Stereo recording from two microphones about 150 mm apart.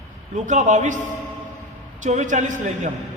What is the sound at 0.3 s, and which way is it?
Speech, 55° right (ahead or behind).